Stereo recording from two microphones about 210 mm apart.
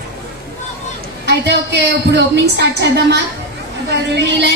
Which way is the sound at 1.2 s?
55° right (ahead or behind).